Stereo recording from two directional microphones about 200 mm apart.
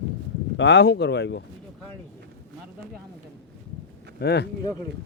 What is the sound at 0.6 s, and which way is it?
Speech, 60° left (ahead or behind).